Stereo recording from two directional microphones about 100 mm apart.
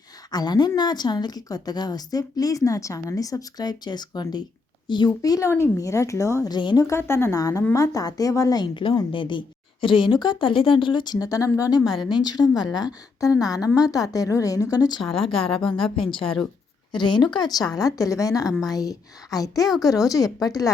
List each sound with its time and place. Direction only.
0.3 s a woman's voice: 40° left (ahead or behind)
6.5 s speech: 45° left (ahead or behind)
6.8 s a woman's voice: 25° left (ahead or behind)
11.8 s a woman's voice: centre (ahead or behind)
12.2 s a woman's voice: 45° left (ahead or behind)
15.0 s a woman's voice: 5° left (ahead or behind)
16.9 s a woman's voice: 50° left (ahead or behind)